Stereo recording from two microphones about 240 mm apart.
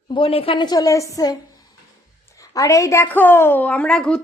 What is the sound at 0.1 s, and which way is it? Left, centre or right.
A woman's voice, left.